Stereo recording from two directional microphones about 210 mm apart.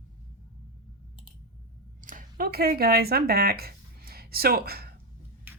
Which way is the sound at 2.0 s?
40° right (ahead or behind).